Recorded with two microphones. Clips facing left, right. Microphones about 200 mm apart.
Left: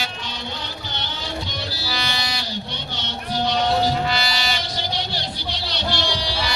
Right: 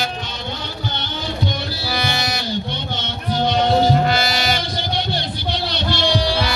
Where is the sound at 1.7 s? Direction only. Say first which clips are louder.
Right 5 dB; 55° right (ahead or behind).